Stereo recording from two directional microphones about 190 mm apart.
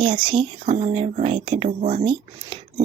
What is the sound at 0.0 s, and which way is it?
Speech, 30° right (ahead or behind).